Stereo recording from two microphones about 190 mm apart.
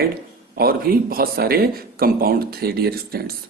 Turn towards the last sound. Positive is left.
turn(degrees=-55)  # may be behind; listen again after turning